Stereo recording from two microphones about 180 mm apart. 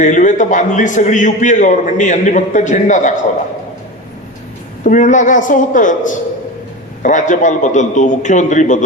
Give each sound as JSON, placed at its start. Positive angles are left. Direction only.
{"t": 0.0, "sound": "a man's voice", "side_deg": 45}
{"t": 4.8, "sound": "a man's voice", "side_deg": 45}